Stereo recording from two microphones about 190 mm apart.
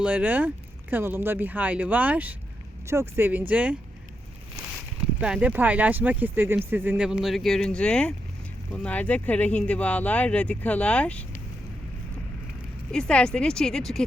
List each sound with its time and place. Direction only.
0.0 s speech: 5° right (ahead or behind)
5.2 s speech: 5° right (ahead or behind)
12.9 s speech: 5° left (ahead or behind)